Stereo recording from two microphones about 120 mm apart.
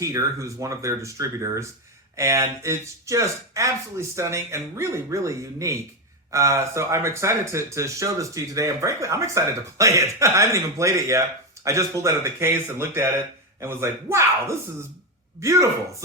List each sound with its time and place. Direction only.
0.0 s speech: 25° right (ahead or behind)